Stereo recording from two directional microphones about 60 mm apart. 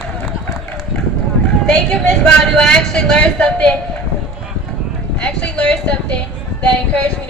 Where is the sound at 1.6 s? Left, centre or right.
Centre.